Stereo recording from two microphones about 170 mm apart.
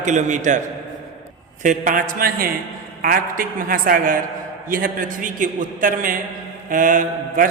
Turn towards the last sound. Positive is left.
turn(degrees=-50)  # may be behind; listen again after turning